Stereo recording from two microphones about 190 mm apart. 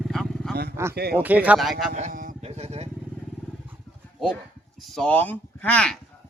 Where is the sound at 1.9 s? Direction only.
40° right (ahead or behind).